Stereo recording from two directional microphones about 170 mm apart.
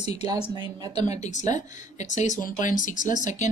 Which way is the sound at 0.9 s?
45° left (ahead or behind).